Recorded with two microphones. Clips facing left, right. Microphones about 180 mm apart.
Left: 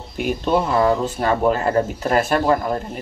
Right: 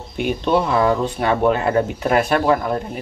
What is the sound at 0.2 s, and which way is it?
Speech, centre (ahead or behind).